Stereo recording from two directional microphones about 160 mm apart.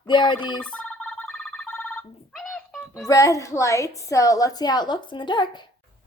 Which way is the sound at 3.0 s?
20° left (ahead or behind).